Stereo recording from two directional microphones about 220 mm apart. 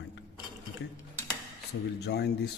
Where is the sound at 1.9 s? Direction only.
50° left (ahead or behind).